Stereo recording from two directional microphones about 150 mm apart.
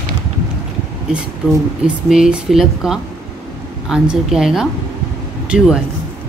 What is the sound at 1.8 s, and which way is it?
Speech, 5° right (ahead or behind).